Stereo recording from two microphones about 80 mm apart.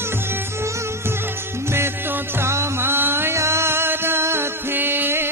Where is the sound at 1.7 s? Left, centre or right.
Right.